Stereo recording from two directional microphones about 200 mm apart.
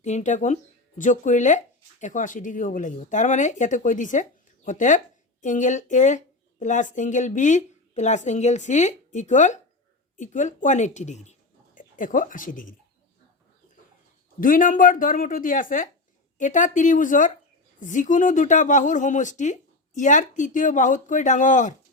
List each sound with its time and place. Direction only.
0.0 s speech: 35° left (ahead or behind)
14.4 s a woman's voice: 45° left (ahead or behind)